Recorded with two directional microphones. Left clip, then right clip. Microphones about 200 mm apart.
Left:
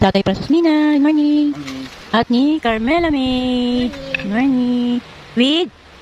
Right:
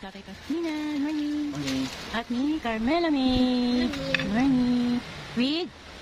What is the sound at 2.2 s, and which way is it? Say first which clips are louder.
Speech: left 14 dB; 35° left (ahead or behind).